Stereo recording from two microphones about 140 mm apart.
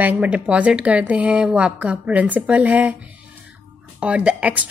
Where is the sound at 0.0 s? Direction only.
10° right (ahead or behind).